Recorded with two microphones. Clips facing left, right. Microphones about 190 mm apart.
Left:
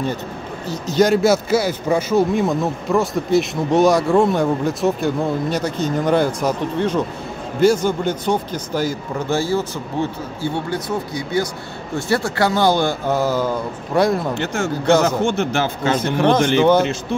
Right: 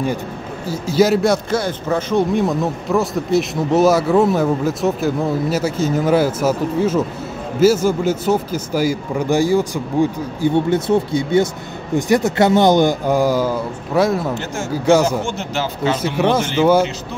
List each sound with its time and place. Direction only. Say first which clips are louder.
0.7 s a man's voice: right 1 dB; 5° right (ahead or behind)
14.3 s speech: left 2 dB; 65° left (ahead or behind)
14.9 s speech: right 2 dB; 10° right (ahead or behind)
15.2 s speech: left 4 dB; 55° left (ahead or behind)
16.2 s speech: left 2 dB; 5° right (ahead or behind)